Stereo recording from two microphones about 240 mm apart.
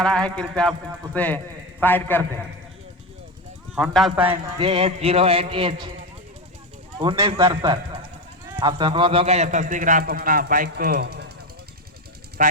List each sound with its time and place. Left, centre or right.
0.0 s a man's voice: centre
3.8 s a man's voice: centre
4.5 s a man's voice: right
7.0 s a man's voice: right
12.4 s a man's voice: right